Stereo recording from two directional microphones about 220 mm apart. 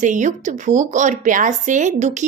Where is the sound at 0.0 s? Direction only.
35° right (ahead or behind).